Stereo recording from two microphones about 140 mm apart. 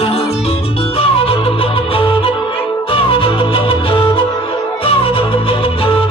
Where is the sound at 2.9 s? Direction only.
40° left (ahead or behind).